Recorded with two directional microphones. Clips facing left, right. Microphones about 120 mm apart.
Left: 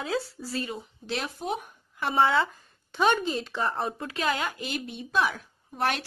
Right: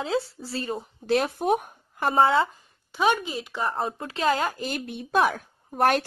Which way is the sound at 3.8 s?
30° right (ahead or behind).